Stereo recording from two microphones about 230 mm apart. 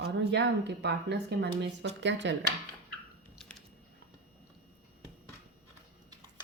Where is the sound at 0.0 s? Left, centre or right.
Right.